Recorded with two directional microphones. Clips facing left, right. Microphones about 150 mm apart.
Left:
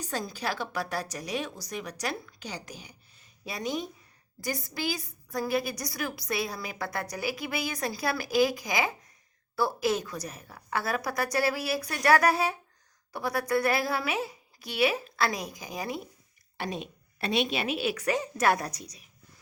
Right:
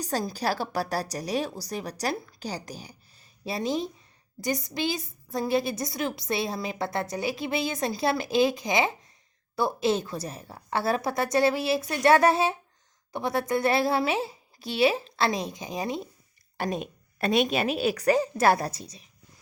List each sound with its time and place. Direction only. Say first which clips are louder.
0.0 s a woman's voice: right 5 dB; 35° right (ahead or behind)
16.6 s a woman's voice: right 5 dB; 45° right (ahead or behind); by 19.0 s 30° right (ahead or behind)